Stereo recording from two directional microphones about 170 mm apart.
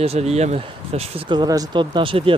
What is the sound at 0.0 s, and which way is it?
Speech, 35° right (ahead or behind).